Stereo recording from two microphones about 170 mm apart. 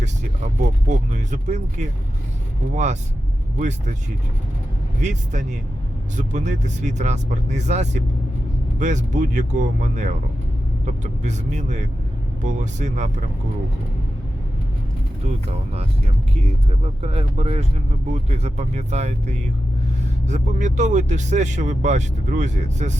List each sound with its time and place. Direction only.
0.0 s speech: 45° right (ahead or behind)
4.9 s speech: 45° right (ahead or behind)
15.4 s speech: 40° right (ahead or behind)